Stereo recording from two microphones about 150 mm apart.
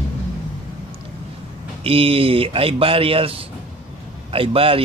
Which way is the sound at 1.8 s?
40° right (ahead or behind).